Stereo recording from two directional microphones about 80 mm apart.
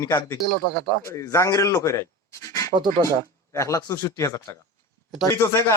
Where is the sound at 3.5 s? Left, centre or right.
Left.